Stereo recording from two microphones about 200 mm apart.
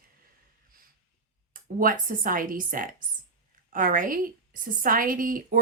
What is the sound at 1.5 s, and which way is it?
A woman's voice, 45° right (ahead or behind).